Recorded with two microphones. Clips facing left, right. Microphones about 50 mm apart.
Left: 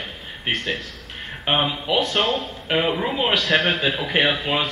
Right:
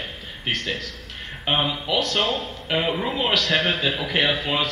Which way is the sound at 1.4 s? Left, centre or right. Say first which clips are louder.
Left 2 dB; centre.